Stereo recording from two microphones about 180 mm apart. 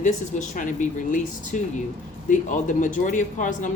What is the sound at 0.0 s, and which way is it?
Speech, 45° left (ahead or behind).